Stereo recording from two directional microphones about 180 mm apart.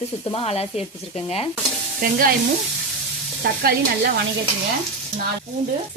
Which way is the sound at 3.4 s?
60° right (ahead or behind).